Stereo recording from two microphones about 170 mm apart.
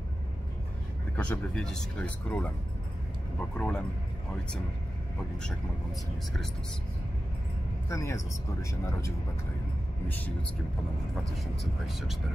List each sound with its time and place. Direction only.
1.1 s speech: 10° left (ahead or behind)
7.9 s speech: 15° left (ahead or behind)
11.8 s speech: centre (ahead or behind)